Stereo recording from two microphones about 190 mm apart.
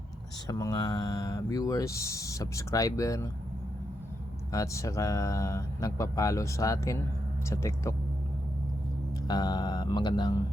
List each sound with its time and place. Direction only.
0.4 s speech: 20° left (ahead or behind)
4.5 s speech: 15° left (ahead or behind)
9.2 s speech: 20° left (ahead or behind)